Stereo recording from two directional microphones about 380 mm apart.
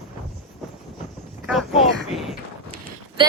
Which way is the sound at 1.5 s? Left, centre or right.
Centre.